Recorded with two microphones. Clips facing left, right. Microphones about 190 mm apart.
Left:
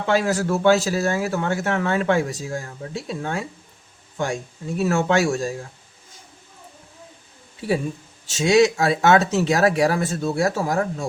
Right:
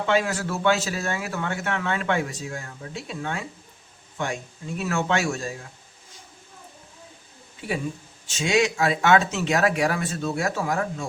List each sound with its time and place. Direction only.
0.0 s speech: 40° left (ahead or behind)
4.8 s speech: 40° left (ahead or behind)
8.4 s speech: 40° left (ahead or behind)